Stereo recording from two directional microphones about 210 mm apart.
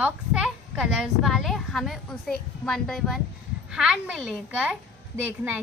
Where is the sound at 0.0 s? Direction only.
5° right (ahead or behind).